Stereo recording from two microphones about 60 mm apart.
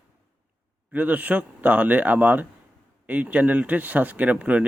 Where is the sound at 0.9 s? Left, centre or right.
Right.